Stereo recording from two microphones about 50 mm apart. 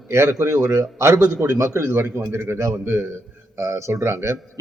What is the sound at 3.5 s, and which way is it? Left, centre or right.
Speech, right.